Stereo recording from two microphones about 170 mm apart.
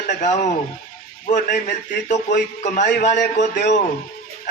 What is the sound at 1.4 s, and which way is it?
A man's voice, 45° left (ahead or behind).